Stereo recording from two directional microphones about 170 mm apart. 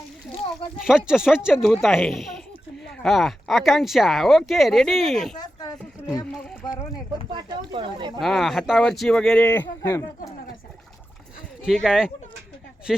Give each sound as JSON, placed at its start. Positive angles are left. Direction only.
{"t": 0.8, "sound": "speech", "side_deg": -5}
{"t": 5.4, "sound": "a sound", "side_deg": 25}
{"t": 7.3, "sound": "speech", "side_deg": -30}
{"t": 8.2, "sound": "speech", "side_deg": 0}
{"t": 11.6, "sound": "speech", "side_deg": 0}